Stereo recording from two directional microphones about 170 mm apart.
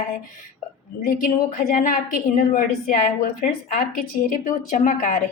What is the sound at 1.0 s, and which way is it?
A woman's voice, 50° left (ahead or behind).